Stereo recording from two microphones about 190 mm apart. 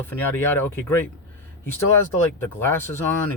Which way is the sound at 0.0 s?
10° left (ahead or behind).